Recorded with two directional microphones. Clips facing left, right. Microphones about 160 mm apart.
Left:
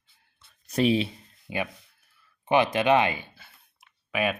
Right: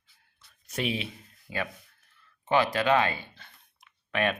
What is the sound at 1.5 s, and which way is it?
Speech, 20° left (ahead or behind).